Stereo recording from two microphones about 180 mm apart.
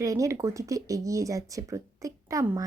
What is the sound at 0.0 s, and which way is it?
A woman's voice, 20° right (ahead or behind).